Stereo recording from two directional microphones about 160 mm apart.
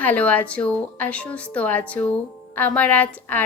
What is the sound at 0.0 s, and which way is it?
A woman's voice, 10° left (ahead or behind).